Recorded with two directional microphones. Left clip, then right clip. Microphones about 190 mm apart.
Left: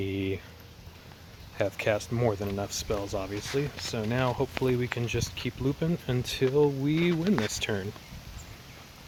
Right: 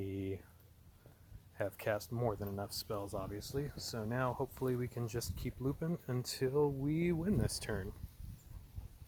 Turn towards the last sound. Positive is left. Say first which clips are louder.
# left 10 dB
turn(degrees=-15)  # may be behind; listen again after turning